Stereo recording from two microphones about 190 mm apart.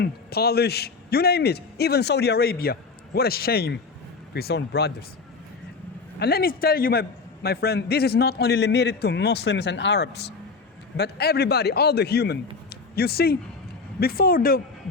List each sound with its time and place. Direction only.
0.0 s a man's voice: 55° left (ahead or behind)
6.1 s a man's voice: 55° left (ahead or behind)